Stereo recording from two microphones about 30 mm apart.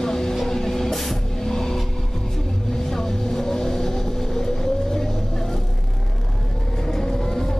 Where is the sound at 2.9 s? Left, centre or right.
Centre.